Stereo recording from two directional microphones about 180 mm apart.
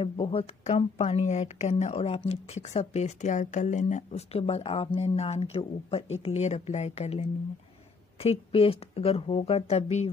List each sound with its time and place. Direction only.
0.0 s a woman's voice: 30° left (ahead or behind)